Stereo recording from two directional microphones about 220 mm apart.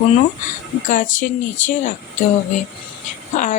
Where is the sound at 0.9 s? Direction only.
35° left (ahead or behind).